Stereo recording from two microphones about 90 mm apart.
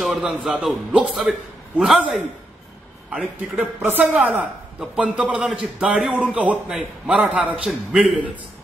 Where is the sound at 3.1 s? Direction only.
5° right (ahead or behind).